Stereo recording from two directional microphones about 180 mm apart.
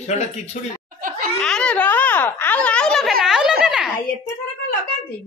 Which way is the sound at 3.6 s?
5° right (ahead or behind).